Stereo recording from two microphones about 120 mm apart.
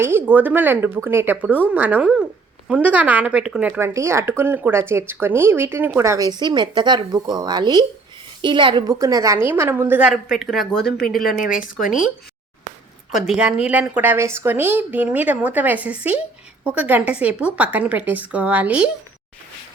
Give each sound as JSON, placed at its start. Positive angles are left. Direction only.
{"t": 0.0, "sound": "a woman's voice", "side_deg": -20}
{"t": 8.9, "sound": "speech", "side_deg": -30}
{"t": 10.1, "sound": "a woman's voice", "side_deg": -5}